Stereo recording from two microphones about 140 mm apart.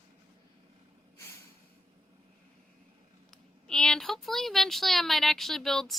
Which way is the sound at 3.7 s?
5° left (ahead or behind).